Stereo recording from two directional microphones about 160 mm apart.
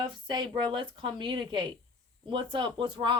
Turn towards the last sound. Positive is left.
turn(degrees=-30)  # may be behind; listen again after turning